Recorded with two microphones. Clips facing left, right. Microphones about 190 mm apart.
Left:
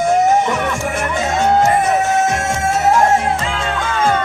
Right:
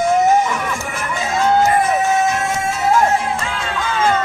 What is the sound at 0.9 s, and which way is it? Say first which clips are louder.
Music: left 4 dB; 50° left (ahead or behind).